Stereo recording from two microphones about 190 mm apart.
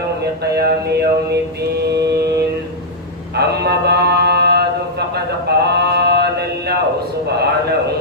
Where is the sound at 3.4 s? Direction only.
60° right (ahead or behind).